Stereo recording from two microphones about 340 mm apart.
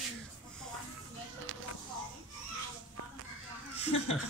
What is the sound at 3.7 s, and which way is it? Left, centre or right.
Speech, centre.